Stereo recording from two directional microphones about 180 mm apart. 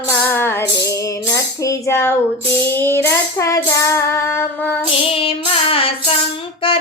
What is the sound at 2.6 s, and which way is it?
Music, 15° left (ahead or behind).